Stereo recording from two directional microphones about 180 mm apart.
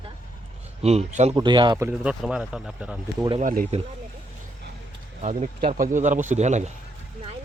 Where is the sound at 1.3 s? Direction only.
25° right (ahead or behind).